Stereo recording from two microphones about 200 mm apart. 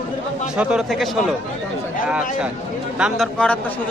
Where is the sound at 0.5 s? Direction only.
5° right (ahead or behind).